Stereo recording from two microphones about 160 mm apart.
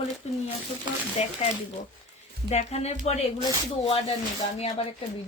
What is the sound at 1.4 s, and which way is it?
A woman's voice, 45° left (ahead or behind).